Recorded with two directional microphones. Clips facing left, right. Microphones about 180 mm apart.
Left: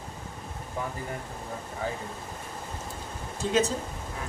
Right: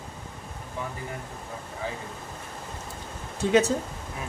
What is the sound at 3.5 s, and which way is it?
Speech, 65° right (ahead or behind).